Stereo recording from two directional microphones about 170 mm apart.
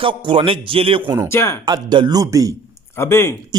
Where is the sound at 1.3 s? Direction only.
15° left (ahead or behind).